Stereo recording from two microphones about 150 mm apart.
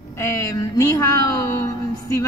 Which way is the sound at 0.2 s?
20° left (ahead or behind).